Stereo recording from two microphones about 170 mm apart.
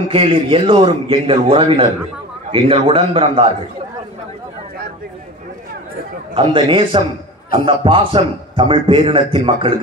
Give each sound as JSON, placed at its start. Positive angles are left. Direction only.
{"t": 0.1, "sound": "a man's voice", "side_deg": -30}
{"t": 6.3, "sound": "a man's voice", "side_deg": -30}